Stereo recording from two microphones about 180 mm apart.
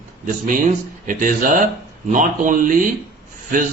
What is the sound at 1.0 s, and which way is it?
A man's voice, 45° right (ahead or behind).